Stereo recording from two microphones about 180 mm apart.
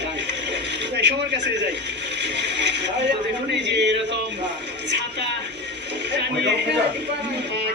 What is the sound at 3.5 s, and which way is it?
Speech, 75° right (ahead or behind).